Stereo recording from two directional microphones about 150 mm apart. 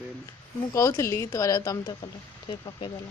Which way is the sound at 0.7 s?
20° left (ahead or behind).